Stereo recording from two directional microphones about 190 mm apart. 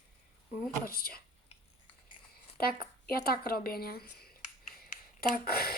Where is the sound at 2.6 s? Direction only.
55° left (ahead or behind).